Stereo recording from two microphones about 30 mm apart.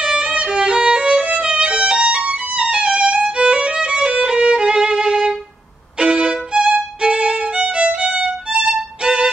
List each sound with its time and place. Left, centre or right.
0.0 s violin: right